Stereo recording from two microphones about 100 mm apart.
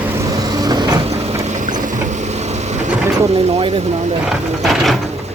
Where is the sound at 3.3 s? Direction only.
90° right.